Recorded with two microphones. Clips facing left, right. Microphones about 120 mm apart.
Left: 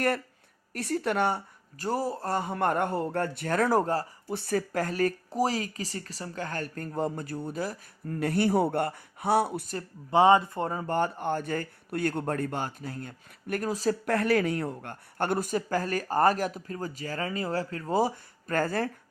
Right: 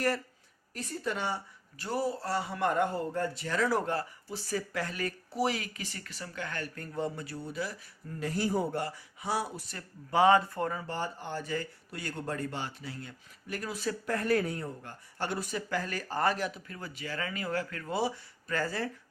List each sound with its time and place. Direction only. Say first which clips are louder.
0.7 s speech: left 7 dB; 65° left (ahead or behind)
1.8 s speech: left 3 dB; 40° left (ahead or behind)
4.3 s speech: left 9 dB; 55° left (ahead or behind)
10.1 s speech: left 3 dB; 25° left (ahead or behind)
10.7 s speech: left 4 dB; 40° left (ahead or behind)
10.9 s speech: left 8 dB; 55° left (ahead or behind); by 13.9 s 40° left (ahead or behind)
14.0 s speech: left 2 dB; 70° left (ahead or behind); by 18.9 s 50° left (ahead or behind)